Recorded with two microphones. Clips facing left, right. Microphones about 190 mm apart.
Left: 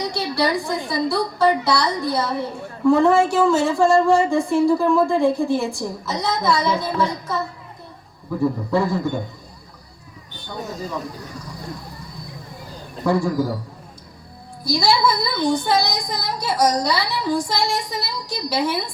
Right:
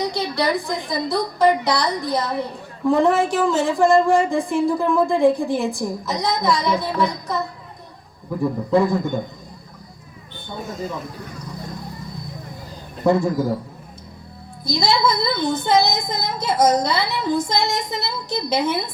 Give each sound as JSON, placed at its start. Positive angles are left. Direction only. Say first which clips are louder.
{"t": 0.0, "sound": "a woman's voice", "louder": "even", "side_deg": -20}
{"t": 8.7, "sound": "a woman's voice", "louder": "right 2 dB", "side_deg": -15}
{"t": 13.1, "sound": "a woman's voice", "louder": "right 2 dB", "side_deg": -20}
{"t": 14.6, "sound": "a woman's voice", "louder": "left 1 dB", "side_deg": -20}